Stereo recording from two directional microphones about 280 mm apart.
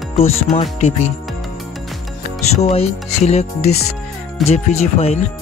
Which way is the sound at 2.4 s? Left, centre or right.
Left.